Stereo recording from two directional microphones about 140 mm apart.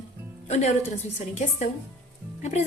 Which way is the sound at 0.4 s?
50° left (ahead or behind).